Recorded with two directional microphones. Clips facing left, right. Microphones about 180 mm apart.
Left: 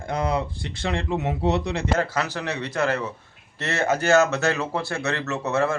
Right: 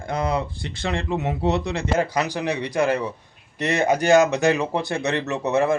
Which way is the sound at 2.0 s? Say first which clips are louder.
Right 3 dB; 15° right (ahead or behind).